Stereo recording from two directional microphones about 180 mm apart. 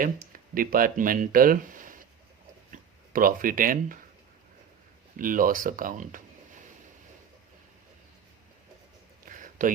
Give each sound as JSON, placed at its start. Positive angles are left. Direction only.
{"t": 0.0, "sound": "speech", "side_deg": -50}
{"t": 5.1, "sound": "speech", "side_deg": -50}
{"t": 9.2, "sound": "a sound", "side_deg": -45}